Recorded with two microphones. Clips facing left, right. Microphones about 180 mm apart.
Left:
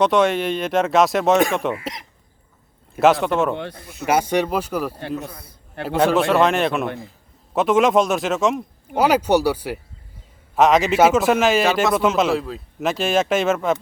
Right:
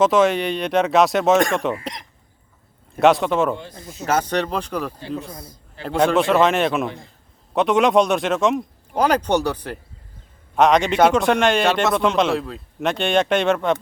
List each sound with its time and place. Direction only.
0.0 s speech: centre (ahead or behind)
3.5 s speech: 65° left (ahead or behind)
4.0 s speech: 10° left (ahead or behind)